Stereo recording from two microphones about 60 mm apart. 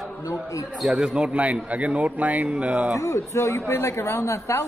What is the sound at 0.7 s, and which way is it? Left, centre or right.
A man's voice, centre.